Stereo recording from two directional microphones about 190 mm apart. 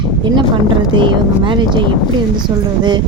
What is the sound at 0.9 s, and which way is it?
Speech, 25° right (ahead or behind).